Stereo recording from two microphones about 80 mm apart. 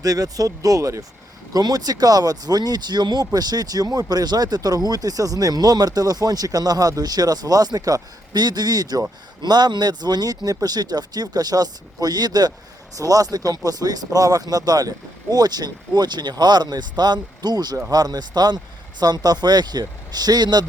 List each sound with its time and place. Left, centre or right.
0.0 s speech: right
1.5 s speech: right